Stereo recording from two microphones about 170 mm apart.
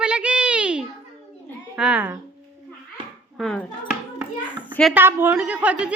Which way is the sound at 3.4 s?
5° left (ahead or behind).